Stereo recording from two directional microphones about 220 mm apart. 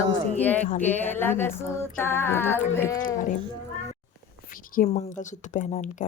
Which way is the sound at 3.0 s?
35° left (ahead or behind).